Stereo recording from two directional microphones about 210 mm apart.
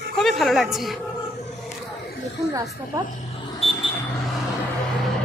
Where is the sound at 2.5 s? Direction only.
15° right (ahead or behind).